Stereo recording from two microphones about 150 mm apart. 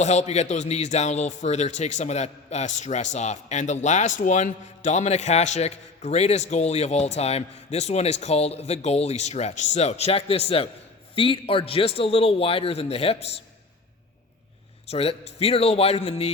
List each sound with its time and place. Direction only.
0.0 s a man's voice: 50° left (ahead or behind)
14.8 s speech: 40° left (ahead or behind)